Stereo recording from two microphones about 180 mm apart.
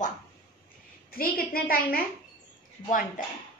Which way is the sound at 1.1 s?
55° left (ahead or behind).